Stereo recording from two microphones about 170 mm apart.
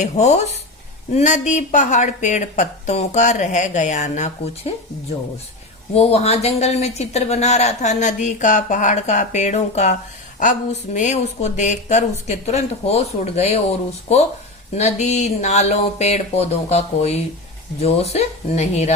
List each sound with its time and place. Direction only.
0.0 s a woman's voice: 45° left (ahead or behind)
5.9 s a woman's voice: 35° left (ahead or behind)
14.8 s speech: 40° left (ahead or behind)